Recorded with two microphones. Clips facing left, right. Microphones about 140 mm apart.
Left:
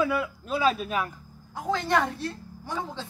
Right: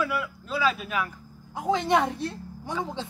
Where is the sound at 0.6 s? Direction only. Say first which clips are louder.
Left 2 dB; 40° left (ahead or behind).